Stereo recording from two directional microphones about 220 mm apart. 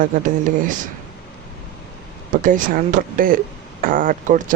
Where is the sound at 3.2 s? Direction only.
40° right (ahead or behind).